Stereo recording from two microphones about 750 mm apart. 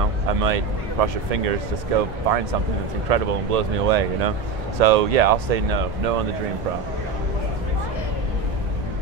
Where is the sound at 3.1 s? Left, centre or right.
Right.